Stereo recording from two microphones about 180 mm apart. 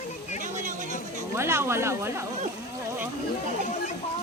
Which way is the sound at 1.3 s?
15° right (ahead or behind).